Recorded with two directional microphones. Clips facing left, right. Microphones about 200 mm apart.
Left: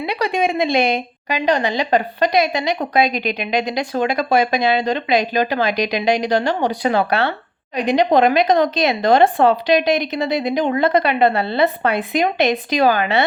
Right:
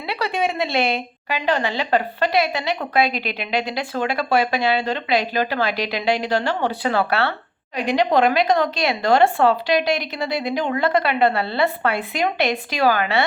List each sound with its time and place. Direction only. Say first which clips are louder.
0.0 s a woman's voice: left 4 dB; 15° left (ahead or behind)